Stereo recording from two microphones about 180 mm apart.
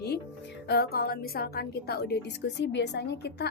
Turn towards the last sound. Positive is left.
turn(degrees=65)  # may be behind; listen again after turning